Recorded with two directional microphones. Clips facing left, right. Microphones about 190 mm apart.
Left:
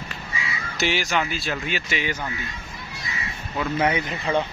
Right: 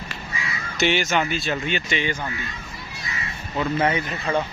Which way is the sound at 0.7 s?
Centre (ahead or behind).